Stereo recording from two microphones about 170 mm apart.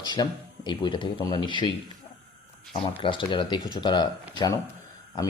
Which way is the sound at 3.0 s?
30° left (ahead or behind).